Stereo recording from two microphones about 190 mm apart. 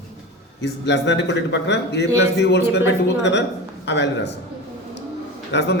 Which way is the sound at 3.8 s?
65° left (ahead or behind).